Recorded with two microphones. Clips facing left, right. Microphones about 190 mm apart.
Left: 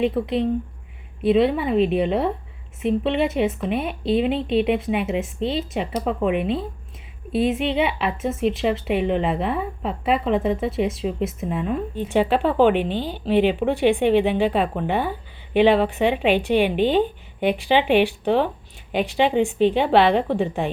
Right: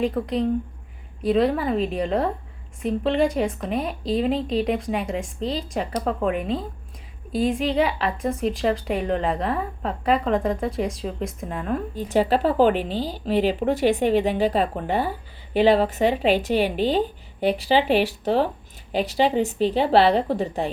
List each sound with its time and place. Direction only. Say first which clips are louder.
0.0 s speech: left 2 dB; 5° left (ahead or behind)
3.7 s speech: left 2 dB; 35° right (ahead or behind)
4.6 s speech: left 3 dB; 5° left (ahead or behind)
7.6 s speech: even; 35° right (ahead or behind)
7.9 s speech: left 1 dB; 5° left (ahead or behind)
11.9 s speech: left 1 dB; 40° right (ahead or behind)